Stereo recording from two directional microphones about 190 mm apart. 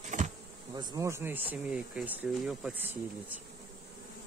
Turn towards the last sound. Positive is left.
turn(degrees=-5)  # may be behind; listen again after turning